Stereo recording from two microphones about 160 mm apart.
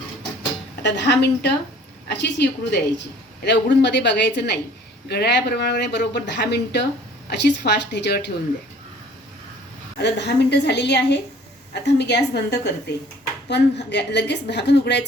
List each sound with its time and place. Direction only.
0.8 s a woman's voice: 90° left
10.0 s a woman's voice: 90° left